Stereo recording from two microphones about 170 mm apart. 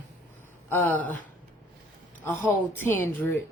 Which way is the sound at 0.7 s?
10° left (ahead or behind).